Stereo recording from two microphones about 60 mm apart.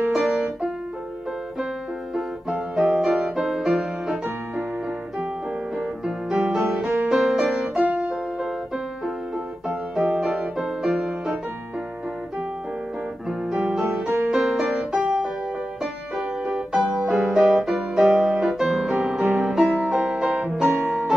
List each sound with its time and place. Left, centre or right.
0.1 s music: centre
2.8 s music: centre
3.1 s music: centre
6.0 s music: centre
7.8 s music: right
8.4 s music: centre
13.3 s music: centre